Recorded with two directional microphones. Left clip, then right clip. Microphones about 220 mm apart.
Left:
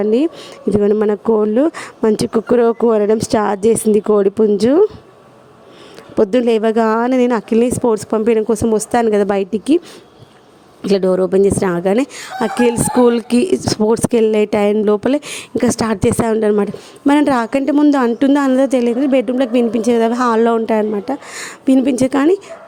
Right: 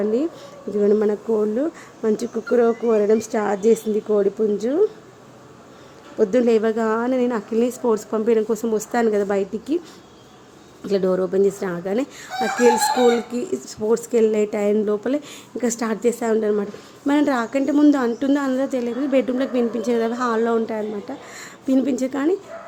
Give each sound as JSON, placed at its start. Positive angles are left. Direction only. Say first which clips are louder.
{"t": 0.0, "sound": "speech", "louder": "left 7 dB", "side_deg": 40}
{"t": 6.1, "sound": "speech", "louder": "left 4 dB", "side_deg": 40}
{"t": 10.8, "sound": "speech", "louder": "left 6 dB", "side_deg": 35}